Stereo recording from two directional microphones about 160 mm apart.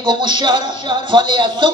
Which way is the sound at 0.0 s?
30° right (ahead or behind).